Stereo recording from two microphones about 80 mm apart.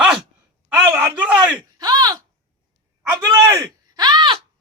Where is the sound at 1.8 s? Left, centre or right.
Right.